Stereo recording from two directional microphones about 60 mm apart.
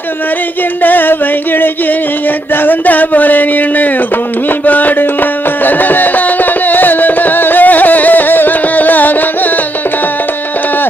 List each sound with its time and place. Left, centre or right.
0.8 s music: left
2.5 s speech: left
4.6 s music: left